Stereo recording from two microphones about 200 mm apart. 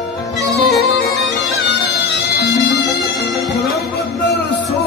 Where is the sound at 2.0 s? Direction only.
55° left (ahead or behind).